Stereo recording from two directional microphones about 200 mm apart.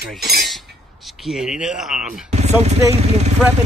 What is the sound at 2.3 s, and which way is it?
Speech, 35° right (ahead or behind).